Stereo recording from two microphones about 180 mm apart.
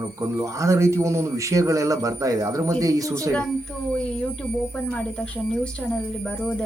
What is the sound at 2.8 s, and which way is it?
Speech, 20° right (ahead or behind).